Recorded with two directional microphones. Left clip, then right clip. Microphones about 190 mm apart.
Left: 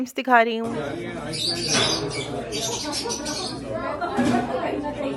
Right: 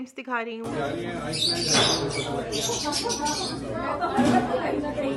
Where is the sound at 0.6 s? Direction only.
Centre (ahead or behind).